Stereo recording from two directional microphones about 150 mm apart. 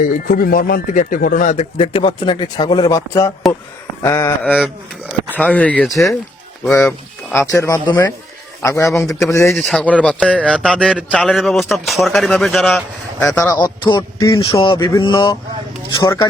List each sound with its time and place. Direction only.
0.0 s speech: 75° left (ahead or behind); by 1.6 s 55° left (ahead or behind)
1.8 s speech: 35° left (ahead or behind); by 6.1 s centre (ahead or behind)
6.7 s speech: 20° left (ahead or behind)
9.6 s a man's voice: 5° left (ahead or behind)
13.3 s speech: 20° left (ahead or behind)